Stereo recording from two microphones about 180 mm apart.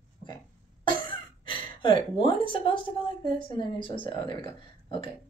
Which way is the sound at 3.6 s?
30° left (ahead or behind).